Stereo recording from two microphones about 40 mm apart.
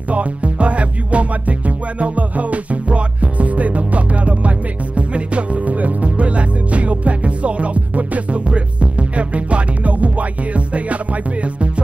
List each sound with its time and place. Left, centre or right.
0.1 s music: right